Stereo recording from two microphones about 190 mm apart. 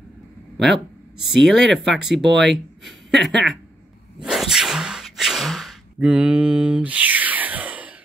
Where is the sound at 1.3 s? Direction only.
Centre (ahead or behind).